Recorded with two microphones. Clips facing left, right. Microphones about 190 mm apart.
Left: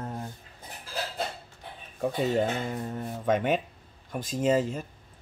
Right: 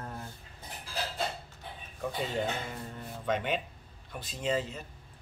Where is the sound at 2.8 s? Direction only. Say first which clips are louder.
Left 6 dB; 45° left (ahead or behind).